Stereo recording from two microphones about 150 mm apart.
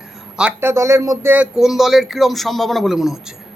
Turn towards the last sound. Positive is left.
turn(degrees=0)  # may be behind; listen again after turning